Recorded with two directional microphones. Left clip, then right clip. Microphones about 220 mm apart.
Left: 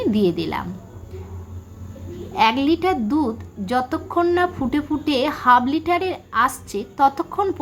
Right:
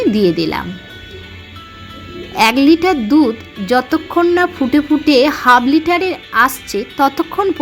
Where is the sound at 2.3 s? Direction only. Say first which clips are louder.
Right 7 dB; 25° right (ahead or behind).